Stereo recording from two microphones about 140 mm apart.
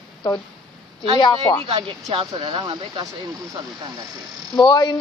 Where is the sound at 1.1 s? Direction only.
35° left (ahead or behind).